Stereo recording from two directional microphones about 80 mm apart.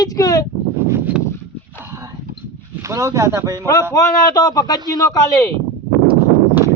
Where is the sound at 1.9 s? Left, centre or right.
Right.